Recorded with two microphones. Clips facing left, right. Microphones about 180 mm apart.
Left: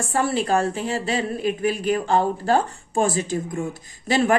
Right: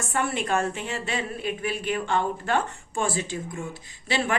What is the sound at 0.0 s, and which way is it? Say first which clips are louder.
A woman's voice: left 5 dB; 35° left (ahead or behind).